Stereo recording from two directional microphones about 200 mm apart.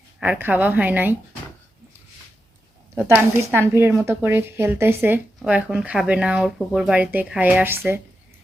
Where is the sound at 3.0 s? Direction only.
10° right (ahead or behind).